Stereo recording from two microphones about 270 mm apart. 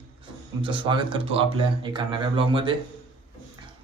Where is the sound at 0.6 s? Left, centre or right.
Centre.